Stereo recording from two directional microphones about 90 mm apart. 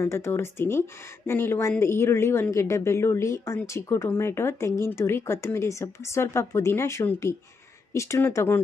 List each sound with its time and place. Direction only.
0.0 s speech: 30° left (ahead or behind)